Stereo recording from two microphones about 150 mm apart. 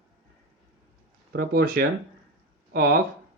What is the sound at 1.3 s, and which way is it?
Speech, 85° right.